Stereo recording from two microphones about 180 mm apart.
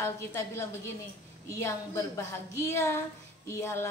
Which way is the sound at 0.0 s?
15° left (ahead or behind).